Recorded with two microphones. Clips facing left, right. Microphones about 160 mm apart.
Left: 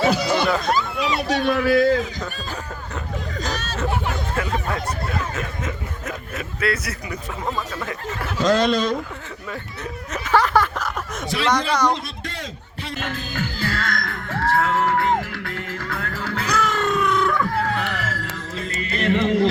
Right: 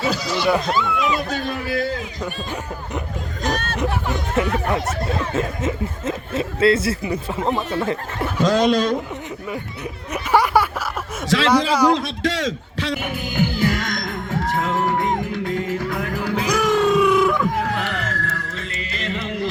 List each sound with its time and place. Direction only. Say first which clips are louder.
0.1 s a sound: left 3 dB; 55° left (ahead or behind)
0.7 s speech: right 1 dB; 35° left (ahead or behind)
1.3 s a man's voice: left 6 dB; 75° left (ahead or behind)
3.4 s speech: right 8 dB; 55° right (ahead or behind)
3.8 s speech: right 1 dB; 20° right (ahead or behind)
8.5 s a man's voice: right 5 dB; 10° right (ahead or behind)
10.1 s a sound: right 1 dB; 10° right (ahead or behind)
11.4 s a man's voice: right 3 dB; 5° right (ahead or behind)
11.9 s a man's voice: right 10 dB; 90° right
13.0 s music: right 1 dB; 15° right (ahead or behind)
17.6 s a sound: right 1 dB; centre (ahead or behind)
18.8 s music: left 9 dB; 55° left (ahead or behind)